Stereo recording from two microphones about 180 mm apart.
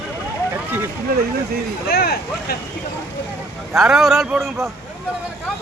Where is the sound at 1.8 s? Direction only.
60° left (ahead or behind).